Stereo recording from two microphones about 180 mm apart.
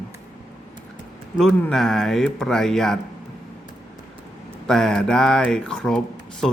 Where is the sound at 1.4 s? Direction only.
5° left (ahead or behind).